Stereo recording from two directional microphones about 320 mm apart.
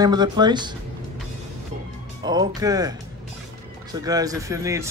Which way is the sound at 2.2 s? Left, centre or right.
Centre.